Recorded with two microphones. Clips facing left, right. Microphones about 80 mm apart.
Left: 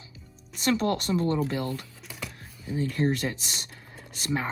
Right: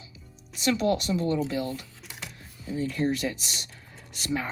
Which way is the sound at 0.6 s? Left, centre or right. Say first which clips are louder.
Right 1 dB; left.